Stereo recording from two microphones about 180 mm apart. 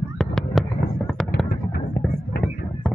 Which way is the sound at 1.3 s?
70° left (ahead or behind).